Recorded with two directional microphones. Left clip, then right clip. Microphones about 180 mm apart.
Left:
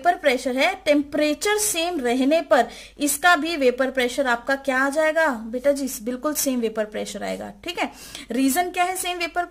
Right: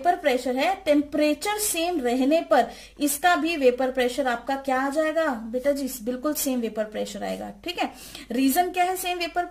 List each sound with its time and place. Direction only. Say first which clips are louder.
0.0 s a woman's voice: left 2 dB; 40° left (ahead or behind)